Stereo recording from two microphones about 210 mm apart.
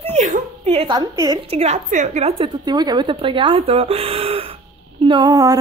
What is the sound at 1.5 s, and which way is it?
Speech, 30° right (ahead or behind).